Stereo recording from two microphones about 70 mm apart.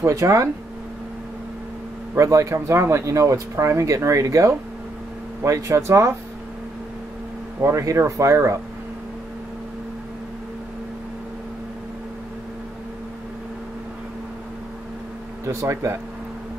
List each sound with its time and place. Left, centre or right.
0.0 s speech: right
2.1 s speech: right
7.6 s speech: right
15.4 s speech: right